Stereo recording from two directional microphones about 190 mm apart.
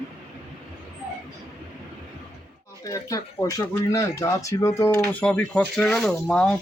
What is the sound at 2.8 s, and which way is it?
Speech, 15° left (ahead or behind).